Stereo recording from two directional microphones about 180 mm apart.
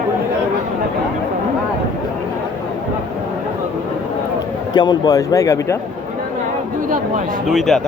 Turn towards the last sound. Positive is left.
turn(degrees=0)  # may be behind; listen again after turning